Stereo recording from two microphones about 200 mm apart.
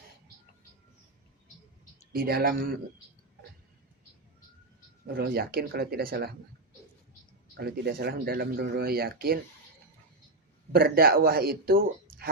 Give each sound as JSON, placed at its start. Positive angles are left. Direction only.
{"t": 2.1, "sound": "speech", "side_deg": -50}
{"t": 5.0, "sound": "speech", "side_deg": -55}
{"t": 7.5, "sound": "speech", "side_deg": -50}
{"t": 10.7, "sound": "speech", "side_deg": -50}